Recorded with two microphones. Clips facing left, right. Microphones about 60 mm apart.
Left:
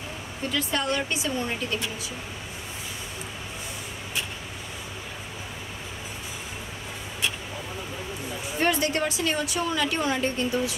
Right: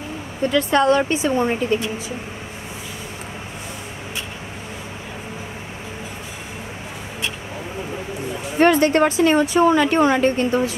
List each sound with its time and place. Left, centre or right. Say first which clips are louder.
0.5 s speech: right 10 dB; right
0.9 s speech: right 9 dB; right
8.5 s speech: right 10 dB; right